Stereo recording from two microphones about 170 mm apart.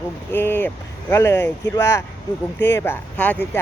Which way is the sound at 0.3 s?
10° left (ahead or behind).